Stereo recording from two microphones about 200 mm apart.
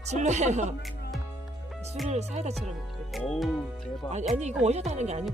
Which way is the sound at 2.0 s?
35° right (ahead or behind).